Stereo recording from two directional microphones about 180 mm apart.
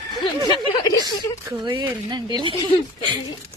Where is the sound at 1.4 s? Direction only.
25° right (ahead or behind).